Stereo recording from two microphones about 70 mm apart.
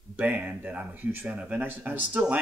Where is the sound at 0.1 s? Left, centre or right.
Right.